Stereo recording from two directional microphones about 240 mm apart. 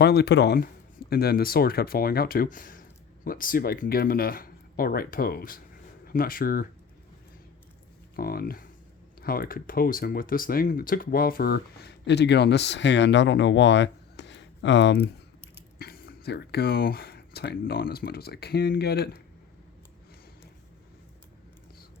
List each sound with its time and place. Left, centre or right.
0.0 s speech: left
8.1 s speech: left